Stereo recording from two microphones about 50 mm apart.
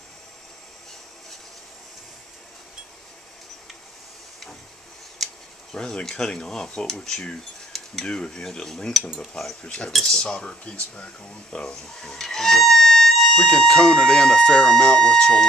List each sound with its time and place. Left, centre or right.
5.2 s a sound: centre
5.8 s speech: centre
9.6 s speech: left
10.3 s speech: left
11.5 s speech: centre